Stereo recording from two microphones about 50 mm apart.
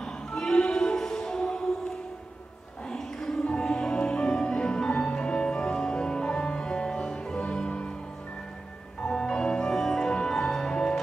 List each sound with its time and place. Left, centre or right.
0.0 s music: centre
2.9 s music: centre
9.0 s music: centre